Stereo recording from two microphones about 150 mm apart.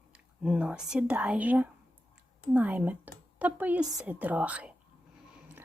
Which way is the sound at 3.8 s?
25° right (ahead or behind).